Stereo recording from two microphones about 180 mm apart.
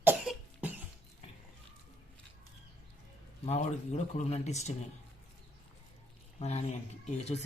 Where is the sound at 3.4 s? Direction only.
40° left (ahead or behind).